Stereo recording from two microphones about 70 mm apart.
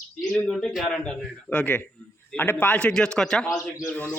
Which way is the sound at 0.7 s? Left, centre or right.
Centre.